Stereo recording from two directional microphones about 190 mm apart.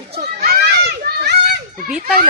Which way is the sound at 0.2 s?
55° right (ahead or behind).